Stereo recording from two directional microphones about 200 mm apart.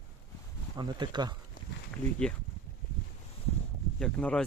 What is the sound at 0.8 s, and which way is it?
Speech, 20° right (ahead or behind).